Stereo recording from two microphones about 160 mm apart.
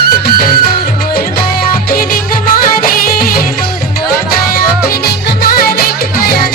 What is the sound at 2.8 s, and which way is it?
Music, 65° left (ahead or behind).